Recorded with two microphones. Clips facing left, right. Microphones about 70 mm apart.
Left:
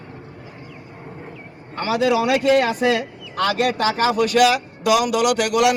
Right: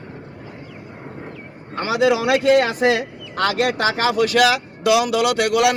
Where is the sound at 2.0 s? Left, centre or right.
Right.